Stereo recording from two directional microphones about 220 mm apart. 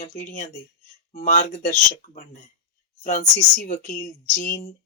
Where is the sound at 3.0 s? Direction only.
35° left (ahead or behind).